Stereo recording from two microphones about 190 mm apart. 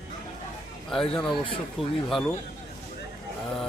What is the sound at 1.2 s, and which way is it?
Speech, 25° left (ahead or behind).